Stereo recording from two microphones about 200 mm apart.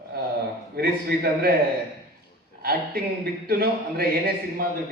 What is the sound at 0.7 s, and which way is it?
Speech, 50° right (ahead or behind).